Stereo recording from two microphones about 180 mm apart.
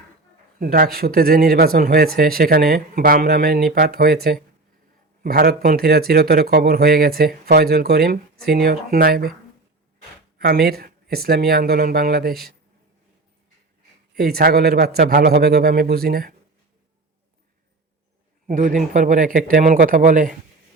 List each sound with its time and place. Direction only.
0.6 s speech: 55° right (ahead or behind)
10.3 s speech: 60° right (ahead or behind)
14.2 s speech: 60° right (ahead or behind)
18.4 s a man's voice: 45° right (ahead or behind)